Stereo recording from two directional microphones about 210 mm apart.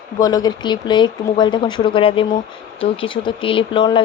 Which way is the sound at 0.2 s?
15° left (ahead or behind).